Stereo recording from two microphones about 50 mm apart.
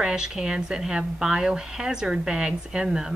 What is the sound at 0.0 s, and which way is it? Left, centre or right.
A woman's voice, centre.